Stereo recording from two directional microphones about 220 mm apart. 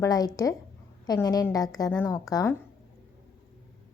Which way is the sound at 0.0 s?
15° left (ahead or behind).